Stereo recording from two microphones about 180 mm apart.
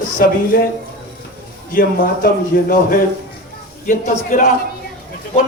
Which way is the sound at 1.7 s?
50° left (ahead or behind).